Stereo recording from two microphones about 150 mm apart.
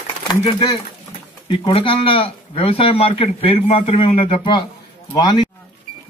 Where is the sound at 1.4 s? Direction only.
35° left (ahead or behind).